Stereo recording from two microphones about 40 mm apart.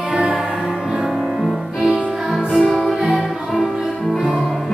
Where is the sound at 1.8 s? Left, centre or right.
Centre.